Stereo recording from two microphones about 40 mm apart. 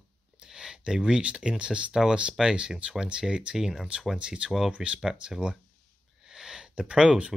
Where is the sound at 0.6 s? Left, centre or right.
Centre.